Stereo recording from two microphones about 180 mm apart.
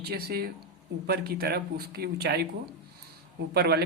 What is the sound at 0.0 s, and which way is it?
Speech, 60° right (ahead or behind).